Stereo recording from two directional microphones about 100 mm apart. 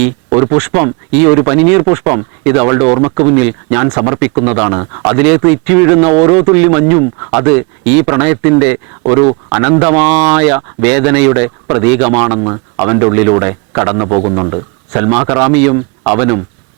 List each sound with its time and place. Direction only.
0.4 s speech: 20° right (ahead or behind)
9.8 s speech: 15° right (ahead or behind)